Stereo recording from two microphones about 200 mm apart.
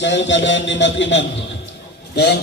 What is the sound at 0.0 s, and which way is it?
A man's voice, 65° left (ahead or behind).